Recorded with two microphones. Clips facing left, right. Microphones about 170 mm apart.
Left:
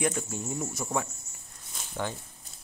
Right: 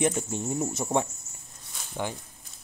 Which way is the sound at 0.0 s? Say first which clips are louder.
Right 3 dB; 20° right (ahead or behind).